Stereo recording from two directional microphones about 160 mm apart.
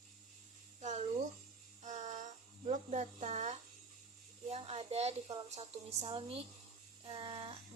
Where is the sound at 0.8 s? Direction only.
45° right (ahead or behind).